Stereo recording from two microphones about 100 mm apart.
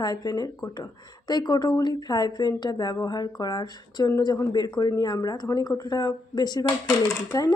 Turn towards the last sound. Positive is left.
turn(degrees=35)  # may be behind; listen again after turning